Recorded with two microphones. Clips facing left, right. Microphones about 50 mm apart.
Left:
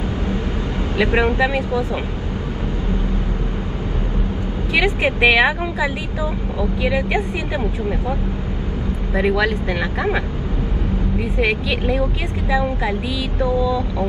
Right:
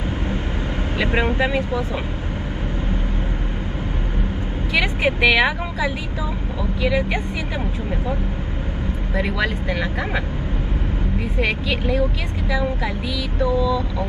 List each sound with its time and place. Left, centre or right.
0.9 s speech: left
1.2 s speech: right
5.0 s a woman's voice: left
6.9 s a woman's voice: left
9.1 s a woman's voice: left
11.3 s a woman's voice: left
13.4 s a sound: left